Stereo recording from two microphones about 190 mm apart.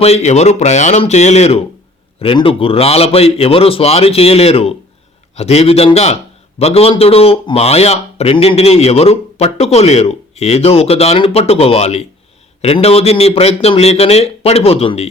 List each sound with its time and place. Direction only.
0.0 s speech: 35° left (ahead or behind)